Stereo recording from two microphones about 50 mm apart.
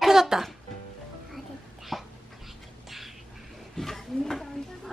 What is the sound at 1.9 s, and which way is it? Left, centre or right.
Dog, centre.